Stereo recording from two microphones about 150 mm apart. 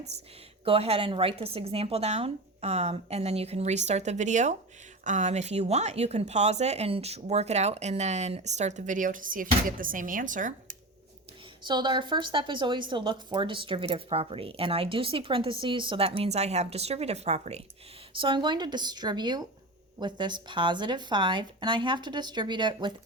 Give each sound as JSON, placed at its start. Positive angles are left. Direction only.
{"t": 0.6, "sound": "speech", "side_deg": -40}
{"t": 11.6, "sound": "a woman's voice", "side_deg": -30}
{"t": 18.1, "sound": "a woman's voice", "side_deg": -35}